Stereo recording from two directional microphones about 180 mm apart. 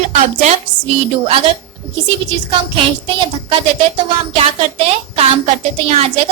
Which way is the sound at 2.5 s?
30° right (ahead or behind).